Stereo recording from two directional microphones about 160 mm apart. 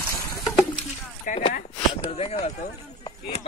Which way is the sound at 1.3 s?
60° left (ahead or behind).